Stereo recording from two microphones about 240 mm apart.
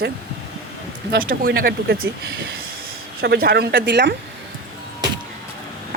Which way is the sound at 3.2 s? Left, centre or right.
Right.